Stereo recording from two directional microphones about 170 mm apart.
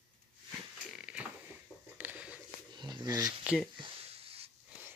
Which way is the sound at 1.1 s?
5° right (ahead or behind).